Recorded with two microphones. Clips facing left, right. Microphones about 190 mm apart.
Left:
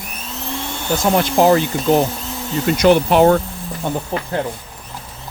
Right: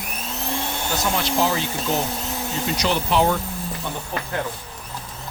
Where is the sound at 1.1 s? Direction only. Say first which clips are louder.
Left 10 dB; 55° left (ahead or behind).